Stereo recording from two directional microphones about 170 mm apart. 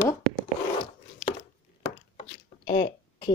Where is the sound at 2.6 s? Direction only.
35° left (ahead or behind).